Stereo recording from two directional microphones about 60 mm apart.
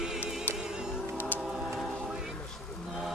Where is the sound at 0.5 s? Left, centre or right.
Centre.